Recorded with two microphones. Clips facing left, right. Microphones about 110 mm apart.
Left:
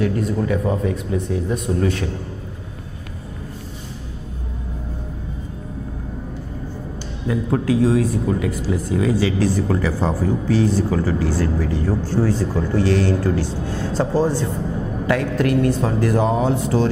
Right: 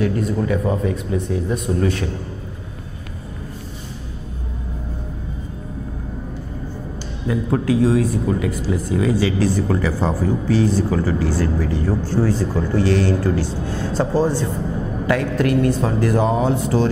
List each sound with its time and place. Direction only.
0.0 s speech: 20° right (ahead or behind)
7.2 s speech: 15° right (ahead or behind)